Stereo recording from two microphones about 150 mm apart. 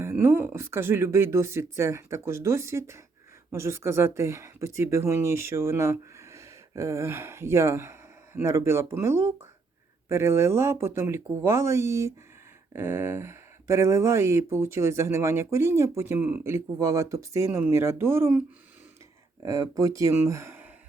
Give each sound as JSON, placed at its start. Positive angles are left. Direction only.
{"t": 0.0, "sound": "speech", "side_deg": -15}